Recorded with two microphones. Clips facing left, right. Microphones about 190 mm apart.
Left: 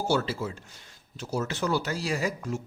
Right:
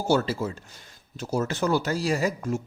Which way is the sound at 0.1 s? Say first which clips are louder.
Right 6 dB; 45° right (ahead or behind).